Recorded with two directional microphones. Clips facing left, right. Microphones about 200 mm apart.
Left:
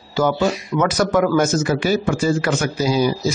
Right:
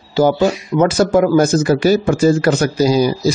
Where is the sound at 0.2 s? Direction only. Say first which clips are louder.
Right 5 dB; 30° right (ahead or behind).